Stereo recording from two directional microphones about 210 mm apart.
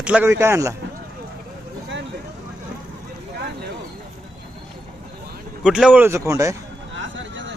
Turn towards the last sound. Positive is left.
turn(degrees=-60)  # may be behind; listen again after turning